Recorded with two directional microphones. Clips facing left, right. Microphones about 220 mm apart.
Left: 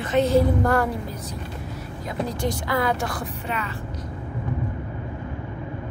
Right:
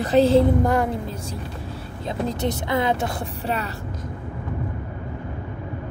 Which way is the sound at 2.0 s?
25° right (ahead or behind).